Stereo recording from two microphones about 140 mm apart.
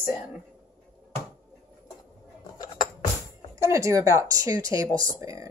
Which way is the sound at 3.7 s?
20° right (ahead or behind).